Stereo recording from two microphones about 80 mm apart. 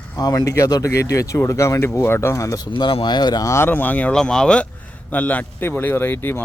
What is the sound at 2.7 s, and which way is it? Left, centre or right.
Speech, left.